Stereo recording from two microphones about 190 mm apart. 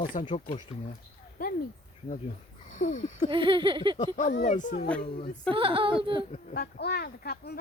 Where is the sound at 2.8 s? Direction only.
40° left (ahead or behind).